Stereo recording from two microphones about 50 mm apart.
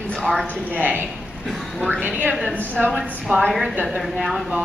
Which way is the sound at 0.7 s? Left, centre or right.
Right.